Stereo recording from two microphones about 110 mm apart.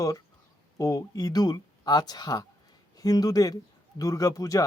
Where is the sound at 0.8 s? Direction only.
30° left (ahead or behind).